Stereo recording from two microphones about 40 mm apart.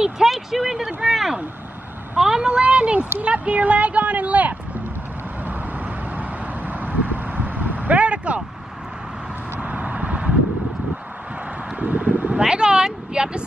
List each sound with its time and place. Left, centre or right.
0.0 s speech: centre
2.6 s a sound: right
3.2 s speech: right
5.4 s vehicle: right
9.6 s vehicle: right
11.8 s speech: right
12.4 s speech: right